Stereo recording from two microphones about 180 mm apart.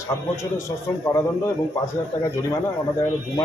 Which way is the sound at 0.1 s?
15° left (ahead or behind).